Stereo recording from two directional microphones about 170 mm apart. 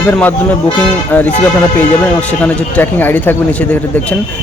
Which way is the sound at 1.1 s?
10° left (ahead or behind).